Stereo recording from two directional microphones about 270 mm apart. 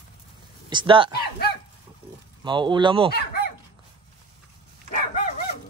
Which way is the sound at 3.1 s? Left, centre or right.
Left.